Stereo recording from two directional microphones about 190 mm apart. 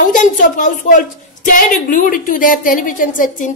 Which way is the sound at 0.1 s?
45° left (ahead or behind).